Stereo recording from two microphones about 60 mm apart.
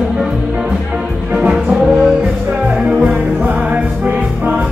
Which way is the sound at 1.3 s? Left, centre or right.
Centre.